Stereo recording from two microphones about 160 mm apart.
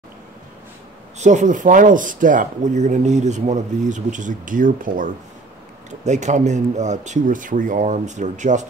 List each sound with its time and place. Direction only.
1.2 s speech: 50° right (ahead or behind)
5.9 s speech: 45° right (ahead or behind)